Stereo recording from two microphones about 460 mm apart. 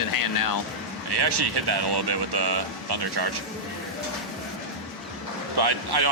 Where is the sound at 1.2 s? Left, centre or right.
Right.